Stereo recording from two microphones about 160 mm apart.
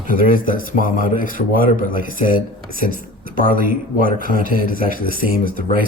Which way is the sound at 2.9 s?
65° right (ahead or behind).